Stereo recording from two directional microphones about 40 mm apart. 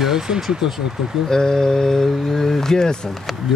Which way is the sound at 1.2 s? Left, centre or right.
Centre.